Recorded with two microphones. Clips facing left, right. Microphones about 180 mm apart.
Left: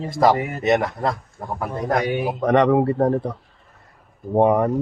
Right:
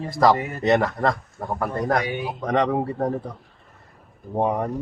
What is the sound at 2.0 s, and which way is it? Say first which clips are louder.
A man's voice: left 6 dB; 60° left (ahead or behind).